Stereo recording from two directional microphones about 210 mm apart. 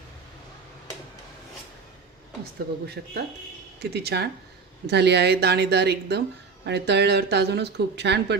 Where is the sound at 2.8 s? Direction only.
50° right (ahead or behind).